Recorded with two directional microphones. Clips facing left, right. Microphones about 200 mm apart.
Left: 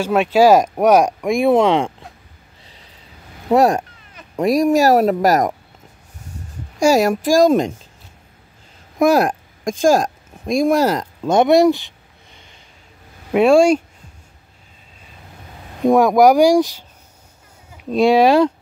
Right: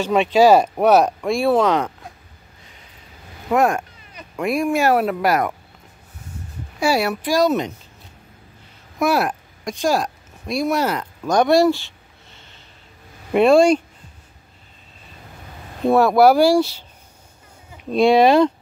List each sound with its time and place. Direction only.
0.0 s speech: 10° left (ahead or behind); by 1.9 s 25° left (ahead or behind)
3.4 s speech: 35° left (ahead or behind)
6.8 s speech: 45° left (ahead or behind)
8.9 s speech: 45° left (ahead or behind)
11.2 s a sound: 20° left (ahead or behind)
13.3 s speech: 5° left (ahead or behind)
15.8 s speech: 15° left (ahead or behind)